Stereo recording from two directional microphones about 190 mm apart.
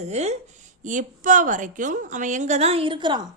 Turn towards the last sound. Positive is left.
turn(degrees=-25)  # may be behind; listen again after turning